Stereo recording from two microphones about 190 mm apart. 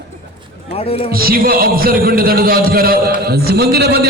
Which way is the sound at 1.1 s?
50° right (ahead or behind).